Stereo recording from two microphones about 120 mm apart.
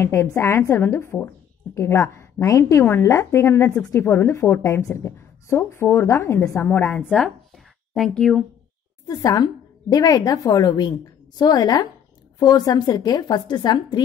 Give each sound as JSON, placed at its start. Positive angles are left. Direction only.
{"t": 0.0, "sound": "a woman's voice", "side_deg": 25}
{"t": 7.1, "sound": "a sound", "side_deg": 0}
{"t": 9.0, "sound": "a woman's voice", "side_deg": 30}